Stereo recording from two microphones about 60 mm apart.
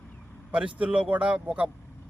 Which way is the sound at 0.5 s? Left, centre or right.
Centre.